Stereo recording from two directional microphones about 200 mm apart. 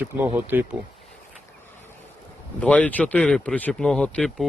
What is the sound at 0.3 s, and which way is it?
Speech, 10° right (ahead or behind).